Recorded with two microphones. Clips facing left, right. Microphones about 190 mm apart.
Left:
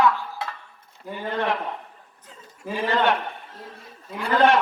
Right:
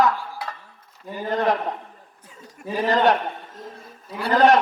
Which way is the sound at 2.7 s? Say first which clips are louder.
Right 3 dB; 40° right (ahead or behind).